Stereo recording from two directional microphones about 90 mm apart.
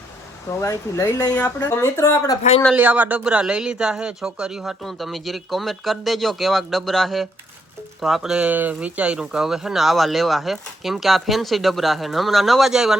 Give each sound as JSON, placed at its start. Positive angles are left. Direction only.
{"t": 0.6, "sound": "speech", "side_deg": 35}
{"t": 2.7, "sound": "speech", "side_deg": -20}
{"t": 8.4, "sound": "speech", "side_deg": -20}